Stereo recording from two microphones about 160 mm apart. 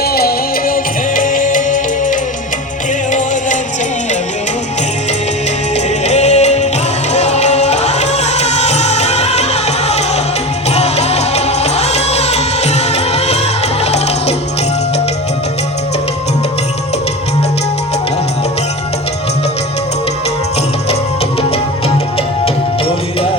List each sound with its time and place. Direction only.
0.0 s music: 70° left (ahead or behind)
1.1 s music: 55° left (ahead or behind)
6.1 s music: 45° left (ahead or behind)